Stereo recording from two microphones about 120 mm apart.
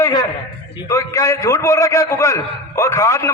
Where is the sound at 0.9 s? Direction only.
30° left (ahead or behind).